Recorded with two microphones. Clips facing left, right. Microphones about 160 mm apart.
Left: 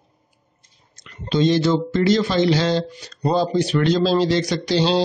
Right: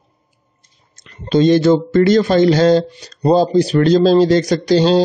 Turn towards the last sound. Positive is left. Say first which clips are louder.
# right 6 dB
turn(degrees=-45)  # may be behind; listen again after turning